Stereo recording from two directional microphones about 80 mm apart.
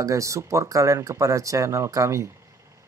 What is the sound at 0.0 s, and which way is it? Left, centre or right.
Speech, right.